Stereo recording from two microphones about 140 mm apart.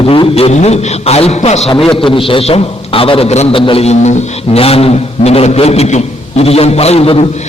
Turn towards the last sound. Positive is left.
turn(degrees=45)  # may be behind; listen again after turning